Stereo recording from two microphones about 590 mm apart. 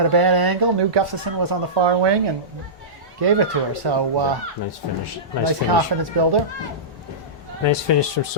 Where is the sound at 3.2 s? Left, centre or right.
Right.